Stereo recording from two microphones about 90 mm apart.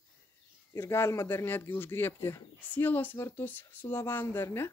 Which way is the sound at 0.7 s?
30° left (ahead or behind).